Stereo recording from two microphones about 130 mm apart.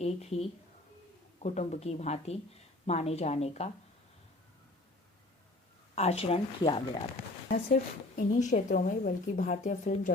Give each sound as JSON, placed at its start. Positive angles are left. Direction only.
{"t": 0.0, "sound": "speech", "side_deg": 55}
{"t": 5.9, "sound": "speech", "side_deg": 55}
{"t": 7.4, "sound": "a woman's voice", "side_deg": 80}